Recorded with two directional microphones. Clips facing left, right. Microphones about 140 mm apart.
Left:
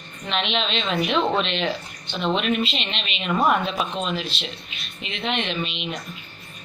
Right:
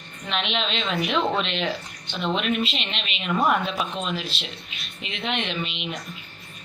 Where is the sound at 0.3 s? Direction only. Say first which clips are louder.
Left 2 dB; 5° right (ahead or behind).